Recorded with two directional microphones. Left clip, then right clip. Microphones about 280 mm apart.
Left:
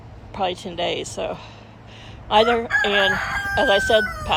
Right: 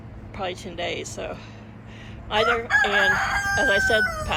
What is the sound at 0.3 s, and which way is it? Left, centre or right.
Speech, centre.